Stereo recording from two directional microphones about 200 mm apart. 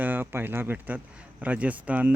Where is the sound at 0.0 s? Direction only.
10° right (ahead or behind).